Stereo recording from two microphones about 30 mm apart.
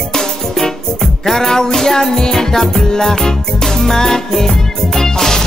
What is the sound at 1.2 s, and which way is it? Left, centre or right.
Music, centre.